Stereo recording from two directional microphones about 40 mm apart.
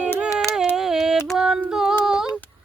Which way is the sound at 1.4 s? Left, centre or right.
Centre.